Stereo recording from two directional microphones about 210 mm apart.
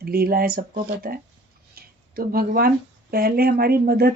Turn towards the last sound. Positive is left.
turn(degrees=-45)  # may be behind; listen again after turning